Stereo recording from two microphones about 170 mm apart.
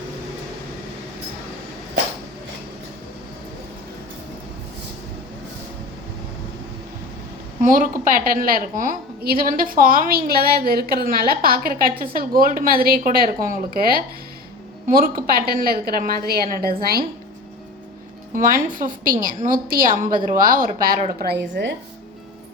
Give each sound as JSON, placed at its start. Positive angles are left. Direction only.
{"t": 7.6, "sound": "a woman's voice", "side_deg": -50}
{"t": 18.3, "sound": "a woman's voice", "side_deg": -55}
{"t": 20.1, "sound": "a woman's voice", "side_deg": -25}
{"t": 20.4, "sound": "a woman's voice", "side_deg": -55}
{"t": 21.2, "sound": "a woman's voice", "side_deg": -80}